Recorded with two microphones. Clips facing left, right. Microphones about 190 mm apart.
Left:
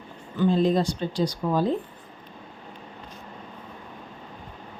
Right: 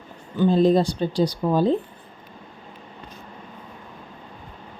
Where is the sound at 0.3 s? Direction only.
35° right (ahead or behind).